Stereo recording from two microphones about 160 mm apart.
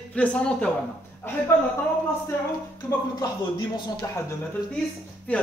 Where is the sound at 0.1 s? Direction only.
10° left (ahead or behind).